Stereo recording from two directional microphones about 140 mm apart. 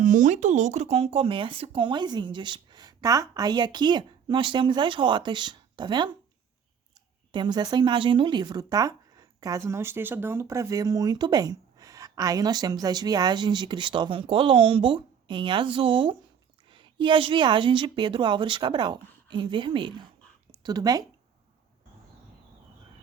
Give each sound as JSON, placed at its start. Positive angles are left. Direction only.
{"t": 0.0, "sound": "speech", "side_deg": -65}
{"t": 7.3, "sound": "a woman's voice", "side_deg": -35}